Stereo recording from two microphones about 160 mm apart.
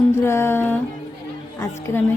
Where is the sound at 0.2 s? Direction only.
15° left (ahead or behind).